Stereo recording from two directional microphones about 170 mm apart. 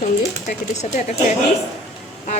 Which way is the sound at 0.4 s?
45° left (ahead or behind).